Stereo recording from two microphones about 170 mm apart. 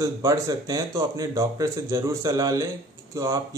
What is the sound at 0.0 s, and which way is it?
Speech, 20° right (ahead or behind).